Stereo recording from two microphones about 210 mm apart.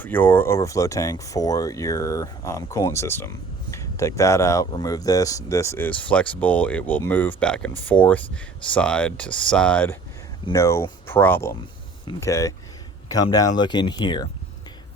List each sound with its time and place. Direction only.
0.0 s speech: 10° left (ahead or behind)